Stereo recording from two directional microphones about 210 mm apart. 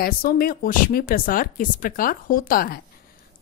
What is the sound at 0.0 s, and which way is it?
A woman's voice, 45° left (ahead or behind).